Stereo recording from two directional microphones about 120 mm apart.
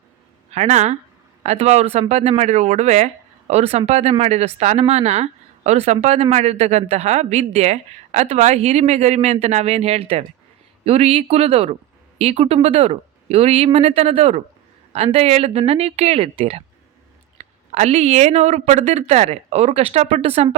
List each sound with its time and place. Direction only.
0.5 s speech: 70° right (ahead or behind)
8.3 s speech: 65° right (ahead or behind)
17.3 s speech: 70° right (ahead or behind)